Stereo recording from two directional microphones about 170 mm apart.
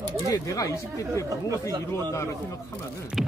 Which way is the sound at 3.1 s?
Centre (ahead or behind).